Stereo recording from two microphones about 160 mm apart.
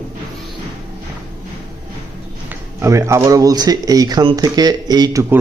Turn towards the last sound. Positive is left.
turn(degrees=-20)  # may be behind; listen again after turning